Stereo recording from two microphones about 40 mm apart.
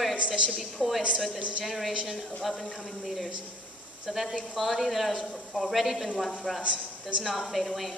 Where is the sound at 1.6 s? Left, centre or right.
Centre.